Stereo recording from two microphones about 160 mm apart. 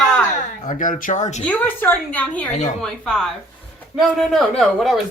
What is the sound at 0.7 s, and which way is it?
Speech, 55° left (ahead or behind).